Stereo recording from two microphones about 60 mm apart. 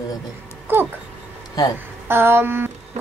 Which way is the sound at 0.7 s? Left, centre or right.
Right.